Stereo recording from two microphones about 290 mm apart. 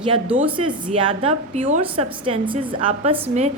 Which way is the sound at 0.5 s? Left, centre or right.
Centre.